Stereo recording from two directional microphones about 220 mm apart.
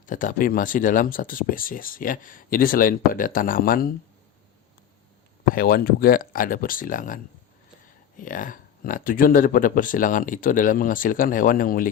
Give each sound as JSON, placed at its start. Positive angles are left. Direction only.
{"t": 0.0, "sound": "speech", "side_deg": 35}
{"t": 5.5, "sound": "speech", "side_deg": 40}